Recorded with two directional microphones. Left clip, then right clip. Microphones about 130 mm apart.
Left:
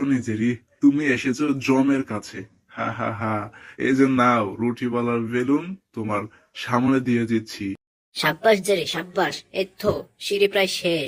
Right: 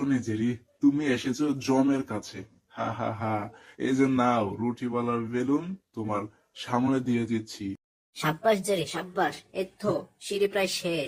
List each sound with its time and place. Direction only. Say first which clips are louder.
0.0 s speech: left 5 dB; 15° left (ahead or behind)